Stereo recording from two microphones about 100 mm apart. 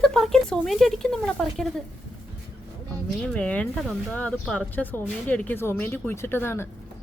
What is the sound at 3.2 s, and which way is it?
Speech, 10° left (ahead or behind).